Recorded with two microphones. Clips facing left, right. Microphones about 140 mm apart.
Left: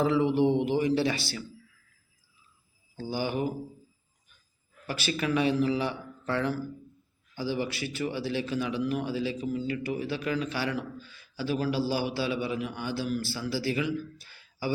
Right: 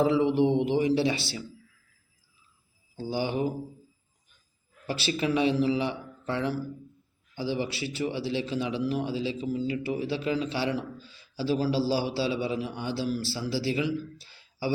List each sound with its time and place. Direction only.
0.0 s a man's voice: 20° right (ahead or behind)
3.0 s a man's voice: 25° right (ahead or behind)
4.9 s a man's voice: 25° right (ahead or behind)